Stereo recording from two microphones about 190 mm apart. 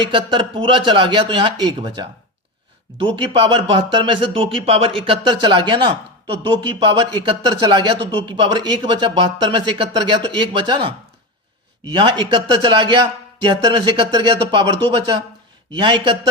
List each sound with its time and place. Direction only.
0.1 s speech: 25° right (ahead or behind)